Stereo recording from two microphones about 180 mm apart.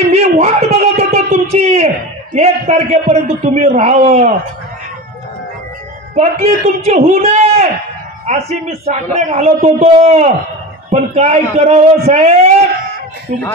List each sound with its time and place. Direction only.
0.1 s a sound: 35° right (ahead or behind)
2.3 s a man's voice: 40° right (ahead or behind)
6.1 s a man's voice: 35° right (ahead or behind)